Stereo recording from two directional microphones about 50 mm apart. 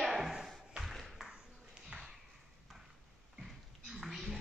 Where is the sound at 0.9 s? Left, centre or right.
Centre.